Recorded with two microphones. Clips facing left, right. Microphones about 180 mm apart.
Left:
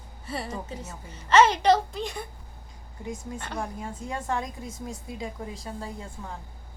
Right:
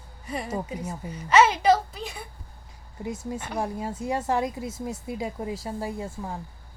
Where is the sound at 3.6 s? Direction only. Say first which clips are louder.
Right 5 dB; 25° right (ahead or behind).